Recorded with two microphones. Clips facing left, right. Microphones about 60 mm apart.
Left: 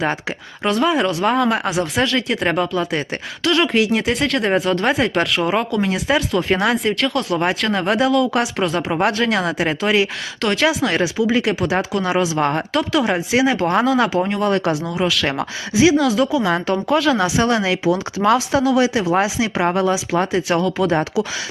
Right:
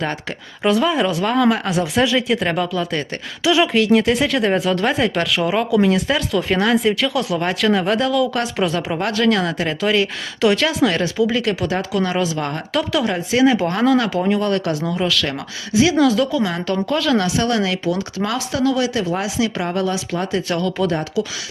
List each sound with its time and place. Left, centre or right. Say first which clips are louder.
0.0 s a woman's voice: left 3 dB; centre
3.4 s speech: right 1 dB; centre
9.1 s a woman's voice: right 1 dB; centre
10.4 s a woman's voice: right 2 dB; centre
12.4 s speech: left 5 dB; left
12.7 s a woman's voice: left 1 dB; centre
14.5 s speech: left 2 dB; centre
14.8 s a woman's voice: even; centre
15.2 s speech: left 3 dB; left
16.0 s speech: right 1 dB; centre
16.4 s speech: left 3 dB; left
16.6 s a woman's voice: left 2 dB; centre
17.2 s speech: left 1 dB; left
18.6 s a woman's voice: left 2 dB; centre